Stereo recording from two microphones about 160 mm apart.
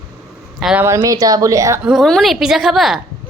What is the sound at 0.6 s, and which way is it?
Speech, 5° right (ahead or behind).